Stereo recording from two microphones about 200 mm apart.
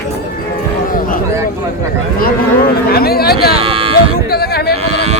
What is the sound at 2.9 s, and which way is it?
Speech, 50° left (ahead or behind).